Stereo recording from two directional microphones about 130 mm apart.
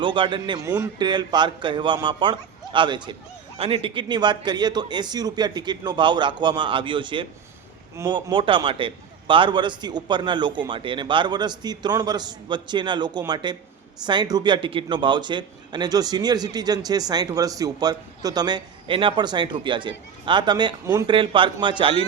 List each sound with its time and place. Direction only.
0.0 s a man's voice: 40° right (ahead or behind)